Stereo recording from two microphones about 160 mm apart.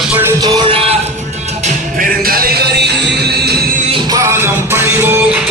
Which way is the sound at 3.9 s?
30° right (ahead or behind).